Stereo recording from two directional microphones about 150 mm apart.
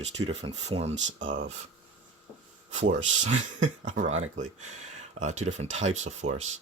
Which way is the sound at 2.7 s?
50° right (ahead or behind).